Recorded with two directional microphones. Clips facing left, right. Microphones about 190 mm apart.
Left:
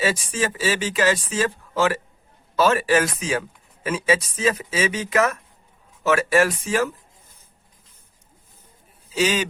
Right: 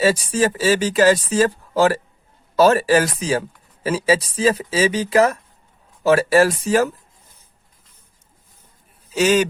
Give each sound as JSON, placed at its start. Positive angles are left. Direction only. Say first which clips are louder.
{"t": 0.0, "sound": "speech", "louder": "right 6 dB", "side_deg": -40}
{"t": 9.1, "sound": "speech", "louder": "right 6 dB", "side_deg": -45}